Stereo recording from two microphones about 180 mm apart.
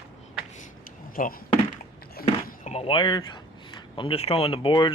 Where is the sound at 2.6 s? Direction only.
35° left (ahead or behind).